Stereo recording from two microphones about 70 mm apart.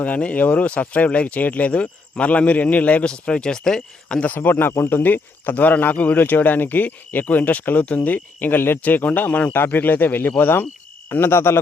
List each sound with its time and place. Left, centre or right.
0.0 s speech: centre
4.4 s speech: left